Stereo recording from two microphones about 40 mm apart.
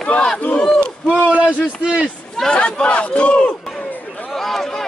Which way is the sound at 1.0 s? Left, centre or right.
Right.